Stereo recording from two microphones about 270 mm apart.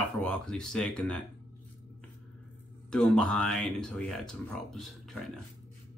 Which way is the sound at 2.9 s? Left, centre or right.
Centre.